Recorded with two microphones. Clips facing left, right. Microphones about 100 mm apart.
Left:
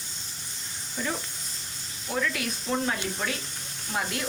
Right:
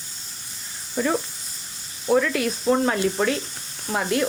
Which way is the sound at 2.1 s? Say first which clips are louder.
Right 9 dB; 55° right (ahead or behind).